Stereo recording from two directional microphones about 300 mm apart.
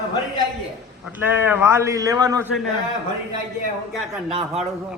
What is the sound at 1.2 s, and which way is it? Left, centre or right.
A man's voice, centre.